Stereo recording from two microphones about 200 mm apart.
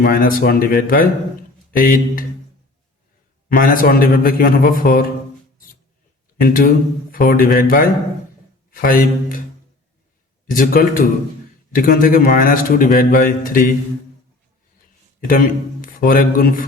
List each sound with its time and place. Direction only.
0.0 s a man's voice: 45° left (ahead or behind)
3.5 s a man's voice: 45° left (ahead or behind)
6.4 s a man's voice: 45° left (ahead or behind)
10.4 s a man's voice: 45° left (ahead or behind)
15.3 s speech: 45° left (ahead or behind)